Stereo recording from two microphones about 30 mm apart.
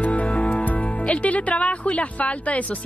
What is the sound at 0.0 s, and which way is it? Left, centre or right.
Music, left.